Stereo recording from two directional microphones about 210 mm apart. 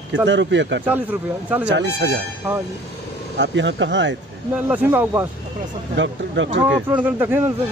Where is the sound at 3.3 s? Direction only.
60° right (ahead or behind).